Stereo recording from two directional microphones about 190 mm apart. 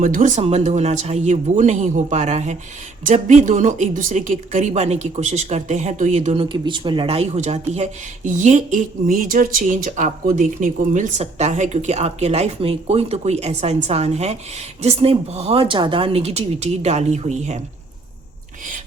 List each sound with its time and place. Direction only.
0.0 s speech: 45° right (ahead or behind)